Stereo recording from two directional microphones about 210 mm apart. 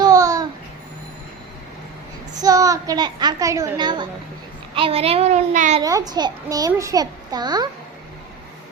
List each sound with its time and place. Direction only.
0.0 s babbling: 15° right (ahead or behind)
2.4 s a child's voice: 15° right (ahead or behind); by 5.8 s 35° right (ahead or behind)
5.8 s a child's voice: 20° right (ahead or behind)